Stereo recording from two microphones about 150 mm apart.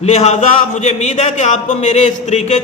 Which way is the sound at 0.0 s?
45° left (ahead or behind).